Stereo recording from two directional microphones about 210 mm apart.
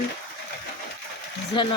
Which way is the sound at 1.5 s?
20° left (ahead or behind).